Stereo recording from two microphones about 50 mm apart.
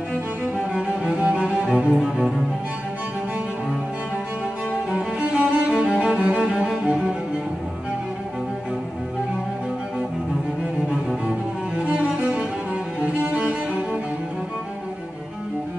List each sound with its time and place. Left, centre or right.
1.0 s cello: right
4.9 s music: centre
11.9 s cello: right
13.0 s music: right